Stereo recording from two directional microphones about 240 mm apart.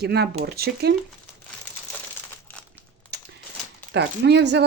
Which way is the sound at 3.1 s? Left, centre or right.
Right.